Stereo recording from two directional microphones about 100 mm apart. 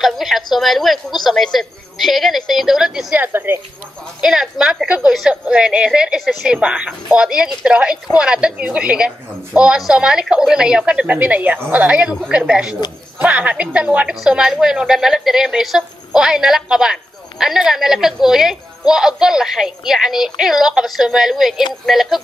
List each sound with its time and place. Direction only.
0.0 s a woman's voice: centre (ahead or behind)
3.2 s speech: 25° right (ahead or behind)
4.2 s a woman's voice: 5° right (ahead or behind)